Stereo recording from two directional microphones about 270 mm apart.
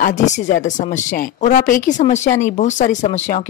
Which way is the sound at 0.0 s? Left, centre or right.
Left.